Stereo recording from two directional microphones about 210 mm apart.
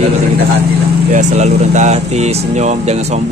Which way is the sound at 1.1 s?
35° right (ahead or behind).